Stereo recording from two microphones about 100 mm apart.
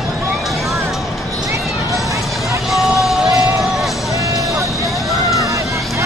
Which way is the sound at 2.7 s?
Centre (ahead or behind).